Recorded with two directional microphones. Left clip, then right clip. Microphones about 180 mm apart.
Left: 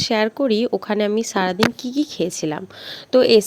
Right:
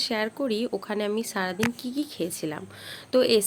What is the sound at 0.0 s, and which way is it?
Speech, 50° left (ahead or behind).